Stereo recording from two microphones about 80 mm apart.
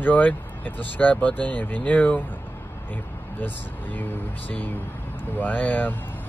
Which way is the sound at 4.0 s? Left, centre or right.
Left.